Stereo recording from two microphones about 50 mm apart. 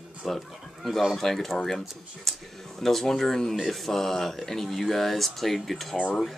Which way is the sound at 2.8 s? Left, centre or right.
Centre.